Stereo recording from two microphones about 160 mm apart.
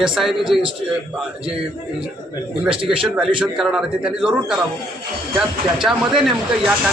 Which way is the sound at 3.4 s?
5° right (ahead or behind).